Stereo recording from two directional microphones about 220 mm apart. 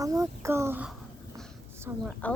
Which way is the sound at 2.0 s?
5° left (ahead or behind).